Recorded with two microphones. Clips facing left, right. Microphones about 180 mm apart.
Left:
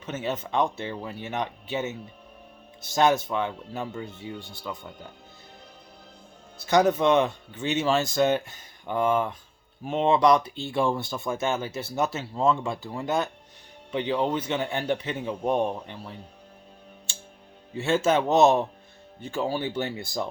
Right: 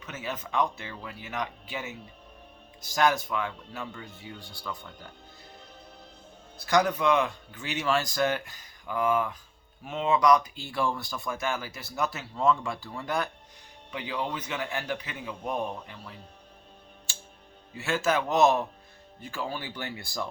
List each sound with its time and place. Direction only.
0.0 s speech: 25° left (ahead or behind)
6.7 s speech: 25° left (ahead or behind)
17.7 s speech: 25° left (ahead or behind)